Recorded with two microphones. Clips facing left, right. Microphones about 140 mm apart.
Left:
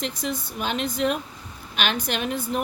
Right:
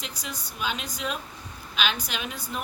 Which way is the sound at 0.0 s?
55° left (ahead or behind).